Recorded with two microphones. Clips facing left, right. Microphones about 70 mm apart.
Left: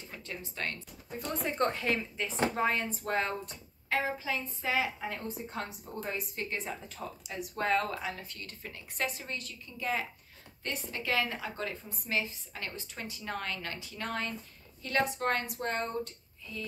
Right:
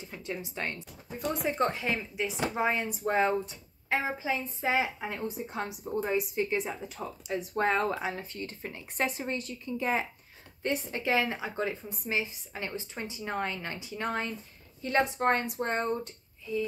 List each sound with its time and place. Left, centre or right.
0.0 s speech: centre
1.1 s a woman's voice: centre
7.2 s a woman's voice: right